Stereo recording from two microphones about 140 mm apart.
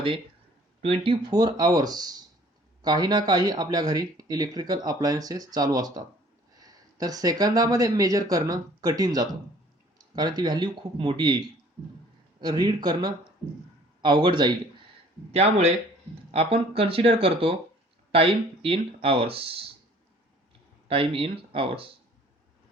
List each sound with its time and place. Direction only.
0.8 s speech: 40° right (ahead or behind)
15.3 s speech: 50° right (ahead or behind)
20.8 s speech: 40° right (ahead or behind)